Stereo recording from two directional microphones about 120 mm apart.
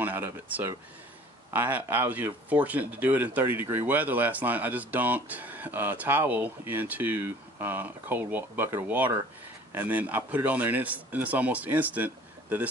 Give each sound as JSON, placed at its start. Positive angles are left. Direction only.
{"t": 0.0, "sound": "speech", "side_deg": -15}